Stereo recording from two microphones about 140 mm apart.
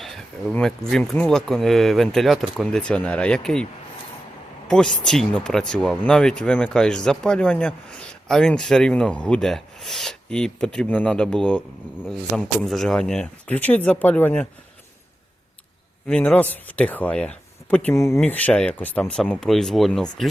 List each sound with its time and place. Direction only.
0.0 s speech: centre (ahead or behind)
4.7 s speech: 5° left (ahead or behind)
16.0 s speech: 10° left (ahead or behind)